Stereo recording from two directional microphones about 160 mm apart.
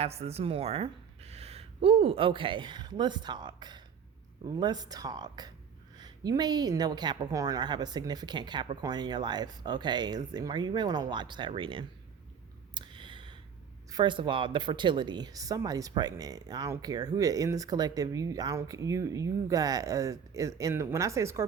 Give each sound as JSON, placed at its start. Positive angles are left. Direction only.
{"t": 0.0, "sound": "speech", "side_deg": -40}
{"t": 12.7, "sound": "a sound", "side_deg": -30}
{"t": 13.9, "sound": "speech", "side_deg": -30}